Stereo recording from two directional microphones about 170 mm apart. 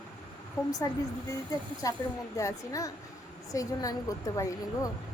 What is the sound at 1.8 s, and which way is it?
A woman's voice, 20° left (ahead or behind).